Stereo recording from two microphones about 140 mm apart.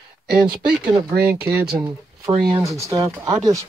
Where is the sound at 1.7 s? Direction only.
25° right (ahead or behind).